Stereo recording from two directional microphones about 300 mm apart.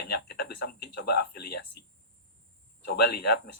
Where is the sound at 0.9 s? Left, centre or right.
Left.